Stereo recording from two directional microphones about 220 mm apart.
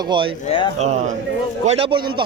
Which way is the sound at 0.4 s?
25° left (ahead or behind).